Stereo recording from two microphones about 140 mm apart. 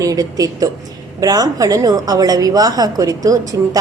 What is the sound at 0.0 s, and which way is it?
A woman's voice, 25° right (ahead or behind).